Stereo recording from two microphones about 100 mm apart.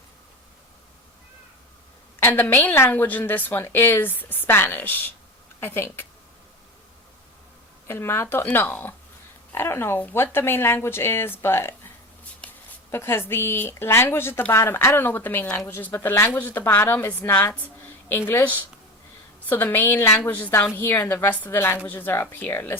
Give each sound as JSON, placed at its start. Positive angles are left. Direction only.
{"t": 2.2, "sound": "speech", "side_deg": 20}
{"t": 7.9, "sound": "speech", "side_deg": 25}
{"t": 12.9, "sound": "speech", "side_deg": 25}